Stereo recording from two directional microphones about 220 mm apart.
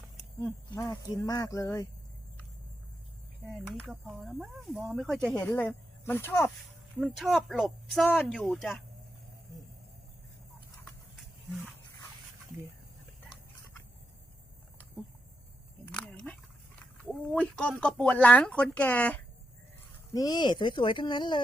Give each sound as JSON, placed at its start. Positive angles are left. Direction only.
{"t": 0.4, "sound": "speech", "side_deg": 15}
{"t": 3.4, "sound": "speech", "side_deg": 5}
{"t": 7.0, "sound": "speech", "side_deg": 0}
{"t": 15.9, "sound": "a sound", "side_deg": 5}
{"t": 17.0, "sound": "speech", "side_deg": 5}
{"t": 20.1, "sound": "speech", "side_deg": 15}